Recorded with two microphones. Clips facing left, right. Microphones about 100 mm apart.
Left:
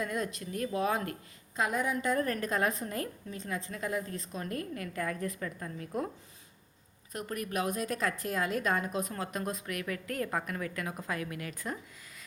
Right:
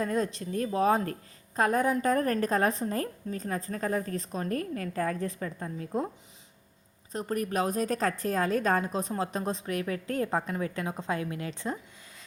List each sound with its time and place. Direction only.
0.0 s a woman's voice: 35° right (ahead or behind)
7.1 s a woman's voice: 30° right (ahead or behind)